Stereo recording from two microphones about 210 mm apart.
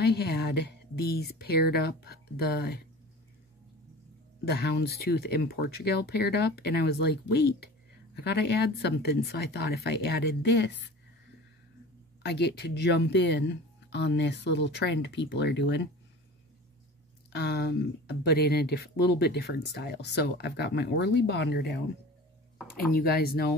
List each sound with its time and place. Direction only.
0.0 s speech: 50° left (ahead or behind)
4.5 s speech: 50° left (ahead or behind)
12.2 s speech: 50° left (ahead or behind)
17.3 s speech: 50° left (ahead or behind)
22.9 s speech: 45° left (ahead or behind)